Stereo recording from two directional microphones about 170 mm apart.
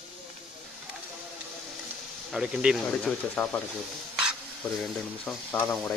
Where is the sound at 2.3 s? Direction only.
5° right (ahead or behind).